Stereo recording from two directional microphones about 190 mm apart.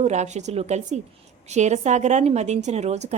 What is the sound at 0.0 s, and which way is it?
A woman's voice, 35° right (ahead or behind).